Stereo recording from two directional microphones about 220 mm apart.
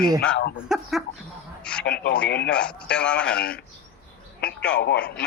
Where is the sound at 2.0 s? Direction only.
45° left (ahead or behind).